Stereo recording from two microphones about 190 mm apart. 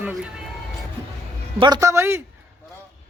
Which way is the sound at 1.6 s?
20° right (ahead or behind).